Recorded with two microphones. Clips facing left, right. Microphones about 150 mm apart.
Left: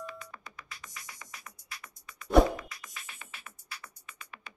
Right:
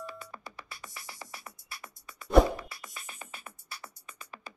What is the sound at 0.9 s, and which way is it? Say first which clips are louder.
Music: right 3 dB; 30° right (ahead or behind).